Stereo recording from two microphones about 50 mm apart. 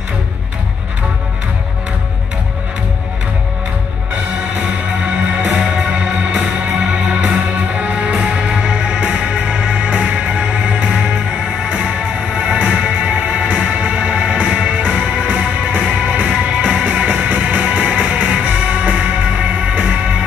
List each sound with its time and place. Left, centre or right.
5.4 s music: centre
12.4 s music: right